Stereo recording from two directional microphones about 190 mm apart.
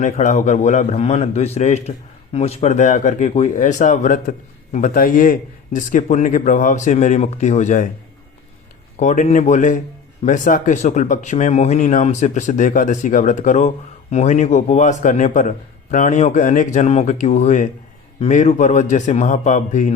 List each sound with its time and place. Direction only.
0.0 s speech: 40° left (ahead or behind)
9.0 s speech: 40° left (ahead or behind)